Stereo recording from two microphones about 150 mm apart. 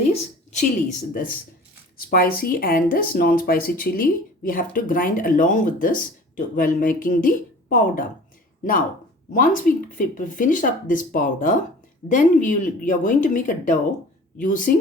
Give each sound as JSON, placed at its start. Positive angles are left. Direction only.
{"t": 0.1, "sound": "speech", "side_deg": 45}
{"t": 2.0, "sound": "speech", "side_deg": 80}
{"t": 9.3, "sound": "speech", "side_deg": 60}